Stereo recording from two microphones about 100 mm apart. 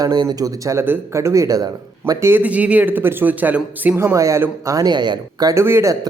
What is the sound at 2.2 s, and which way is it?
A man's voice, 20° right (ahead or behind).